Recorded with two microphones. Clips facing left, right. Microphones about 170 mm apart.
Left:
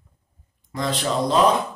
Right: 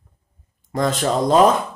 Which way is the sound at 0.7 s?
50° right (ahead or behind).